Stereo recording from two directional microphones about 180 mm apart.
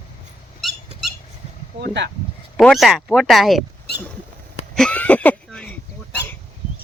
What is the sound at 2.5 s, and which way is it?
Speech, centre (ahead or behind).